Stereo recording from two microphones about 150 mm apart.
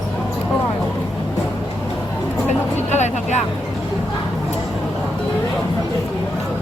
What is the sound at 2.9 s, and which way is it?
Vehicle, 50° left (ahead or behind).